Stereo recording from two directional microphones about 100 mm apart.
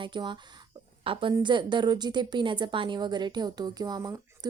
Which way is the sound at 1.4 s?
50° right (ahead or behind).